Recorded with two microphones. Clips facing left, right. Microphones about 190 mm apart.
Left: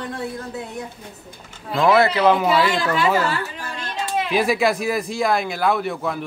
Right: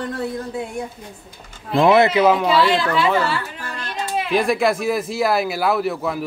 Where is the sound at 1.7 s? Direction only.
25° right (ahead or behind).